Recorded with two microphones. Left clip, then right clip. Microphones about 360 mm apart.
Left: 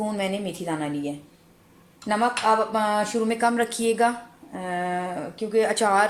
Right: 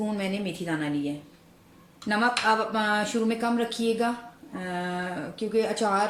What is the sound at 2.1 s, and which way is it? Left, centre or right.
Speech, left.